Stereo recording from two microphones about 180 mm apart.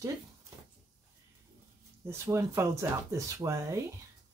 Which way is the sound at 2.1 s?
15° right (ahead or behind).